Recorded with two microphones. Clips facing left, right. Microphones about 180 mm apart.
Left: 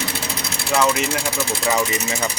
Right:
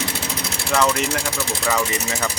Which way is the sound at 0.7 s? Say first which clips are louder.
Left 1 dB; 5° left (ahead or behind).